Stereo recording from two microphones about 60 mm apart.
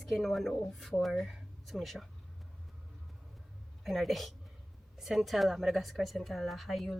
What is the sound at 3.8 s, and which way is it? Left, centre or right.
A woman's voice, centre.